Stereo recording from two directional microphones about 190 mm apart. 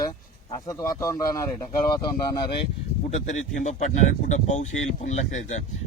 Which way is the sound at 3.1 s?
40° left (ahead or behind).